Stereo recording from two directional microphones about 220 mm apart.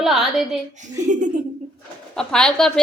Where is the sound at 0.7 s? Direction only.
35° right (ahead or behind).